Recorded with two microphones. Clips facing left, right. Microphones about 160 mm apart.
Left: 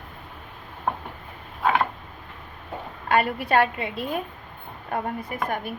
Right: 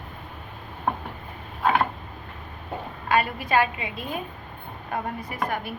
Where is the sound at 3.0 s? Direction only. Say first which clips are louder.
Left 2 dB; 60° left (ahead or behind).